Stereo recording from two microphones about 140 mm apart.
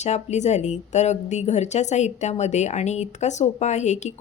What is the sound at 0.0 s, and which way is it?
A woman's voice, 55° left (ahead or behind).